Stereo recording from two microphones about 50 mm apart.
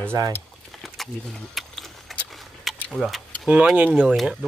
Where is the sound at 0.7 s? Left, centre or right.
Centre.